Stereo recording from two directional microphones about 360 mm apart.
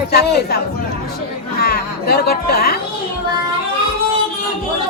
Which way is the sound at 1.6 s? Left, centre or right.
Left.